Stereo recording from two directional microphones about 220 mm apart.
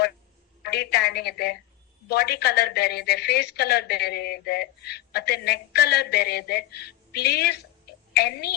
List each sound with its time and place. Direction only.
0.6 s a woman's voice: 45° left (ahead or behind)